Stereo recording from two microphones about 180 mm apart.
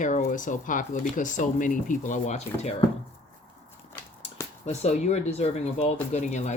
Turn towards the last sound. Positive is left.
turn(degrees=40)  # may be behind; listen again after turning